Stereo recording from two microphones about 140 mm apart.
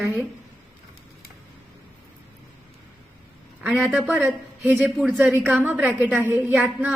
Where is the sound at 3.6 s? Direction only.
5° right (ahead or behind).